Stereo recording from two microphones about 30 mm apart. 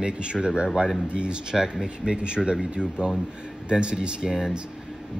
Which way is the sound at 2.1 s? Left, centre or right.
Right.